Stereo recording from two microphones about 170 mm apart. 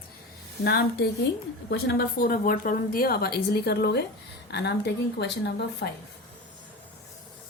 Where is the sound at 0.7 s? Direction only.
70° left (ahead or behind).